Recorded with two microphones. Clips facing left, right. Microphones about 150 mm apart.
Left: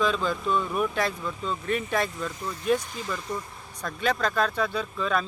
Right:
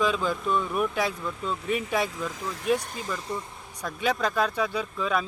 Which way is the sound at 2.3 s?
90° right.